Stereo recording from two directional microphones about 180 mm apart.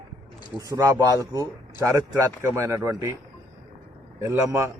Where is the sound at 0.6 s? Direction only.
15° right (ahead or behind).